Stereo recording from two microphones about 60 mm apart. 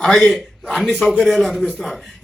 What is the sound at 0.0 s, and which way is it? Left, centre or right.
A man's voice, centre.